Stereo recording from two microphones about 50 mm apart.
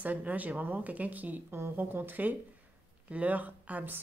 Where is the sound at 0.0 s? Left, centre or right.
Right.